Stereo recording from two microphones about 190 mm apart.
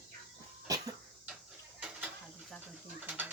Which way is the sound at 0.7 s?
20° right (ahead or behind).